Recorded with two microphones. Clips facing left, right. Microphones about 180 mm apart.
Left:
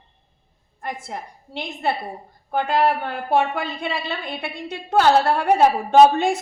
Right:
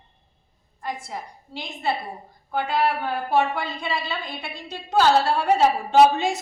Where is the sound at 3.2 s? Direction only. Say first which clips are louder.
Left 3 dB; 60° left (ahead or behind).